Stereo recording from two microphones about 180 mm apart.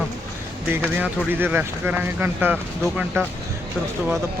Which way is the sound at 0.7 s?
10° right (ahead or behind).